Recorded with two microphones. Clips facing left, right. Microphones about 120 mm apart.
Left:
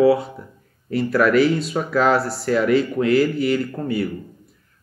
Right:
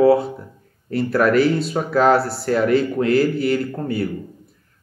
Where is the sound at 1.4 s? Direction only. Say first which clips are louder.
Right 1 dB; centre (ahead or behind).